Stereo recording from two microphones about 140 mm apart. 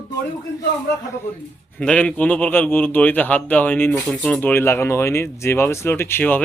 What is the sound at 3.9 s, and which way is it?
Speech, 5° left (ahead or behind).